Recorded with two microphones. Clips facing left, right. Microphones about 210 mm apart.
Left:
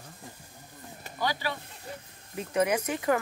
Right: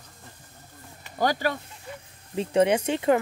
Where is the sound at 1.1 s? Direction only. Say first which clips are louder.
Right 7 dB; 45° right (ahead or behind).